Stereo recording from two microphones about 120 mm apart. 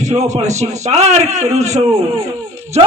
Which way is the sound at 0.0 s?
70° right (ahead or behind).